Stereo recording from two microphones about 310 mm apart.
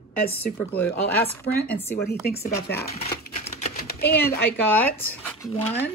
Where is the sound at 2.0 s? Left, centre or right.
Left.